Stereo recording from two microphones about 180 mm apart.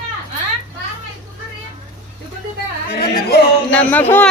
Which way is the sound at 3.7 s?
10° left (ahead or behind).